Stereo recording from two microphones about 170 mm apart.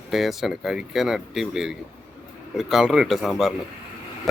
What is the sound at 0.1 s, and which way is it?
Speech, centre (ahead or behind).